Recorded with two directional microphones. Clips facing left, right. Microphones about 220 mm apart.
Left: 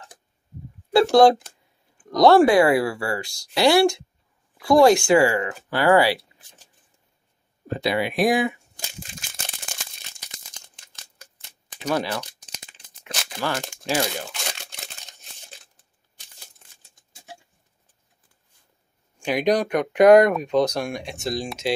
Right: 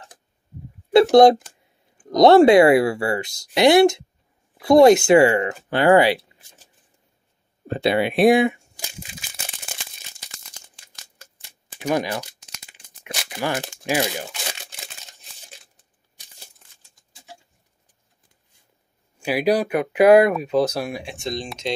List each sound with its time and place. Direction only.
1.1 s speech: 20° right (ahead or behind)
7.6 s speech: 25° right (ahead or behind)
8.7 s crumpling: 10° right (ahead or behind)
10.9 s a sound: 15° right (ahead or behind)
13.0 s tearing: 10° right (ahead or behind)
13.7 s crumpling: 15° right (ahead or behind)
19.1 s speech: 5° right (ahead or behind)